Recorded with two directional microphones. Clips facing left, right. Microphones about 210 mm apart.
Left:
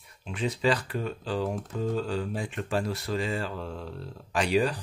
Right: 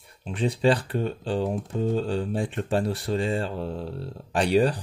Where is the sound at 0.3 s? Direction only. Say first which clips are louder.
Right 4 dB; 35° right (ahead or behind).